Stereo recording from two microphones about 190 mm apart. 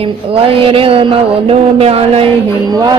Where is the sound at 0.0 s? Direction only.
30° right (ahead or behind).